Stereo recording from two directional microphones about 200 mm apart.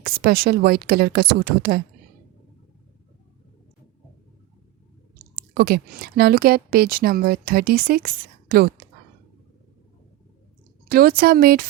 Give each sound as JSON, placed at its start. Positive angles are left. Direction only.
{"t": 0.0, "sound": "speech", "side_deg": -50}
{"t": 5.3, "sound": "speech", "side_deg": -45}
{"t": 10.8, "sound": "speech", "side_deg": -50}